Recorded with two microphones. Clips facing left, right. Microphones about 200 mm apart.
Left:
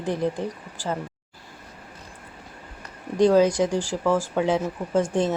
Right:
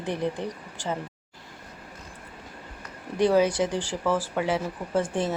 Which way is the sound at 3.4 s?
10° left (ahead or behind).